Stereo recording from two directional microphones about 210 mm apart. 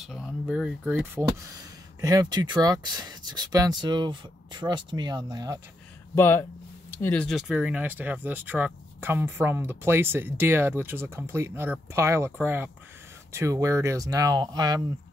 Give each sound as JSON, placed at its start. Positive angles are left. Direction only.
{"t": 0.0, "sound": "speech", "side_deg": 0}
{"t": 6.1, "sound": "speech", "side_deg": 10}